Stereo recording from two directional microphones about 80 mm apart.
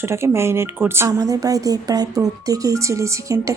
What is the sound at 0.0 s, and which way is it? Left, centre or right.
A woman's voice, right.